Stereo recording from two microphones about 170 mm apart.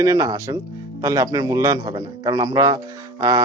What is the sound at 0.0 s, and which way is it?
A man's voice, 20° right (ahead or behind).